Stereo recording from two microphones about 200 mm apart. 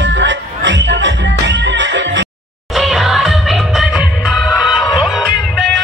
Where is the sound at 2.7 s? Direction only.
Centre (ahead or behind).